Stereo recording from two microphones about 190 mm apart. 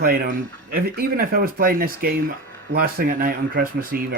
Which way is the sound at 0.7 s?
50° right (ahead or behind).